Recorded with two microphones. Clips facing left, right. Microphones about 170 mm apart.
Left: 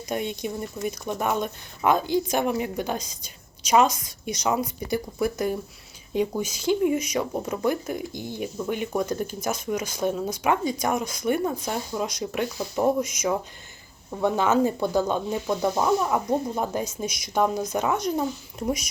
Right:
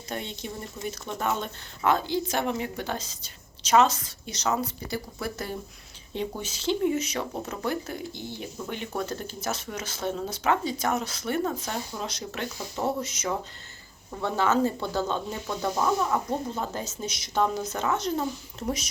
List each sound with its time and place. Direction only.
0.1 s speech: 15° left (ahead or behind)
14.2 s speech: 15° left (ahead or behind)